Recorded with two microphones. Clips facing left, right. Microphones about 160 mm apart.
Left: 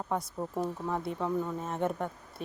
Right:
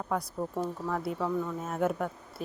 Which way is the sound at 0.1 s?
Centre (ahead or behind).